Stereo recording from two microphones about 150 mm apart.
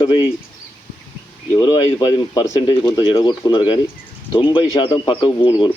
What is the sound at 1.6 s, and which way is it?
Speech, 35° left (ahead or behind).